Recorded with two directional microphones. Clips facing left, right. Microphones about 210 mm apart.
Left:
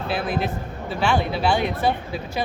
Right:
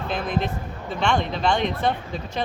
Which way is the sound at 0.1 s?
5° left (ahead or behind).